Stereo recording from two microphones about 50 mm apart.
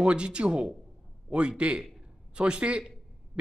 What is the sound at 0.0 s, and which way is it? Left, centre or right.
A man's voice, right.